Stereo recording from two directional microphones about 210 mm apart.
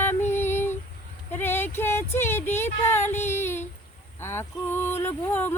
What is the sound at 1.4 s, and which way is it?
Speech, 10° left (ahead or behind).